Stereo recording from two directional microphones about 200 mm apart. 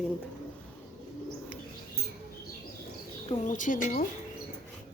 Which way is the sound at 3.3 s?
40° left (ahead or behind).